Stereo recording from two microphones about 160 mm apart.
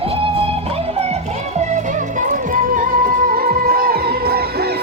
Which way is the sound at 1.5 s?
50° right (ahead or behind).